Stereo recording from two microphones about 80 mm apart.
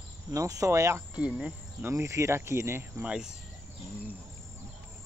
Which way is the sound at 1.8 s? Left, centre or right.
Right.